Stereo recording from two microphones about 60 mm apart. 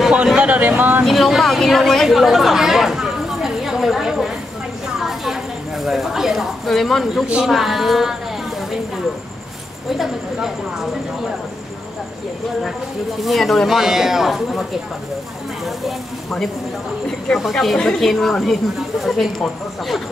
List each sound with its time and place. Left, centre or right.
0.4 s speech: right
1.0 s speech: centre
5.0 s a sound: centre
7.4 s speech: centre
9.8 s speech: centre
13.2 s speech: centre
15.6 s speech: centre